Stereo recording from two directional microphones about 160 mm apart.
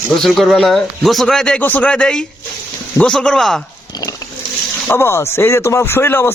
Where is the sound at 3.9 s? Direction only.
20° left (ahead or behind).